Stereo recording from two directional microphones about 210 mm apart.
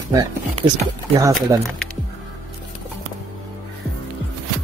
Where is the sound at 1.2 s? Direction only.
15° right (ahead or behind).